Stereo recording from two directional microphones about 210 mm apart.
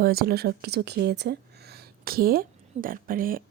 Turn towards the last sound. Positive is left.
turn(degrees=-40)  # may be behind; listen again after turning